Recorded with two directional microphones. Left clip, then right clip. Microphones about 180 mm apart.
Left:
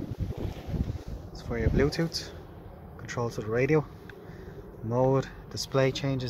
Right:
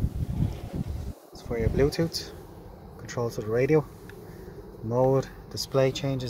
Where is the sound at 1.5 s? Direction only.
20° right (ahead or behind).